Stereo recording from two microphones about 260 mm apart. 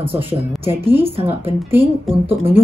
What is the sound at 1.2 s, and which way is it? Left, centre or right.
Speech, right.